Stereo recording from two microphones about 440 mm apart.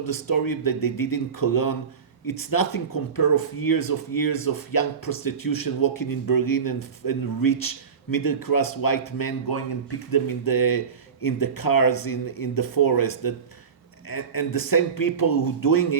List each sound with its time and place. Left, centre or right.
0.0 s speech: left